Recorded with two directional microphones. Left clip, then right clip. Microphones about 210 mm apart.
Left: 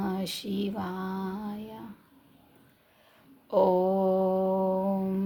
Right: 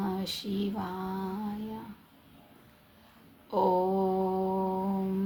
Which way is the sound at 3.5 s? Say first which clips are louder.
Left 3 dB; 50° left (ahead or behind).